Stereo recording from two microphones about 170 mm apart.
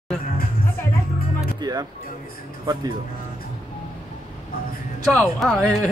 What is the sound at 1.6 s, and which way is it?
Speech, 25° right (ahead or behind).